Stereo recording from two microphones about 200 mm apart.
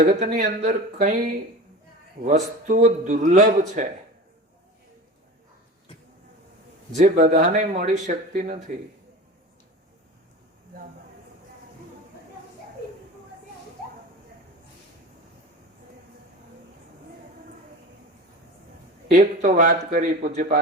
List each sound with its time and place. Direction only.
0.0 s speech: 40° right (ahead or behind)
6.9 s speech: 40° right (ahead or behind)
19.0 s a man's voice: 45° right (ahead or behind)